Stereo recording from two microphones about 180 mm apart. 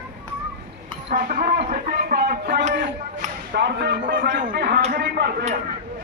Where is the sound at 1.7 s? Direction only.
55° right (ahead or behind).